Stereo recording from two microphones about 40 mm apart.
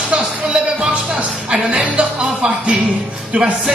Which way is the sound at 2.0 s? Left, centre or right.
Right.